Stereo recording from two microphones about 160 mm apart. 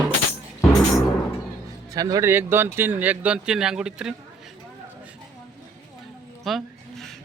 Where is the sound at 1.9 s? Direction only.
20° right (ahead or behind); by 4.1 s 5° right (ahead or behind).